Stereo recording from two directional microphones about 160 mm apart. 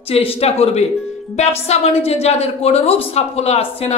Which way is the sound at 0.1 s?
35° left (ahead or behind).